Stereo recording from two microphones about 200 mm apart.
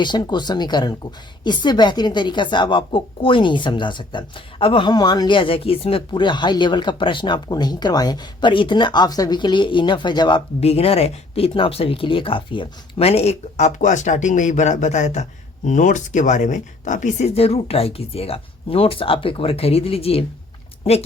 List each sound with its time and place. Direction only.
0.0 s a woman's voice: 20° left (ahead or behind)